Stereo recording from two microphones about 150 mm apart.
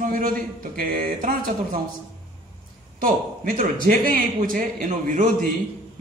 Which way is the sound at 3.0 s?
65° right (ahead or behind).